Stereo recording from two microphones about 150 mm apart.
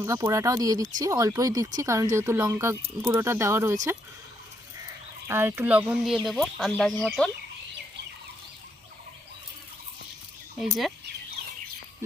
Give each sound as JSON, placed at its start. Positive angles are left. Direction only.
{"t": 0.0, "sound": "speech", "side_deg": -20}
{"t": 5.3, "sound": "speech", "side_deg": -15}
{"t": 10.6, "sound": "speech", "side_deg": 0}